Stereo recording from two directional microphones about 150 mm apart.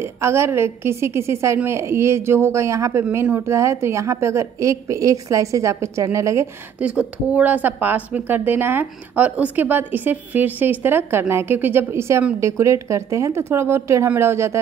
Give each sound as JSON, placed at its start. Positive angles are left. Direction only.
{"t": 0.0, "sound": "a woman's voice", "side_deg": -15}
{"t": 6.8, "sound": "a woman's voice", "side_deg": -10}